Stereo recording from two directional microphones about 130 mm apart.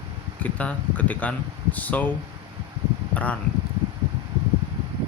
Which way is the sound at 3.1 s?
10° left (ahead or behind).